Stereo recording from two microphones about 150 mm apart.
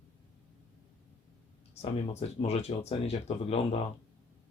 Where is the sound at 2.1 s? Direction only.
45° left (ahead or behind).